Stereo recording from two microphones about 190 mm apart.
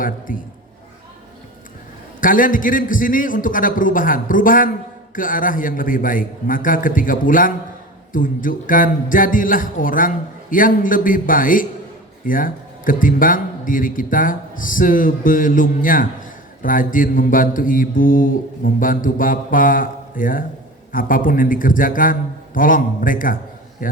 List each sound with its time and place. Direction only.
0.0 s a man's voice: 45° left (ahead or behind)
2.2 s a man's voice: 45° left (ahead or behind)